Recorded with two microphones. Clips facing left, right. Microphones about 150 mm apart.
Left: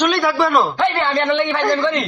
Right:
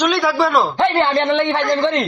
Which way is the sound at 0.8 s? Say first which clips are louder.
Right 2 dB; 20° right (ahead or behind).